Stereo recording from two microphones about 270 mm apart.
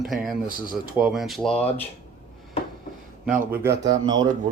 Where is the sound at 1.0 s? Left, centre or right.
Centre.